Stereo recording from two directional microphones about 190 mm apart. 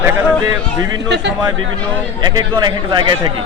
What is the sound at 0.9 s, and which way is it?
Speech, 65° right (ahead or behind).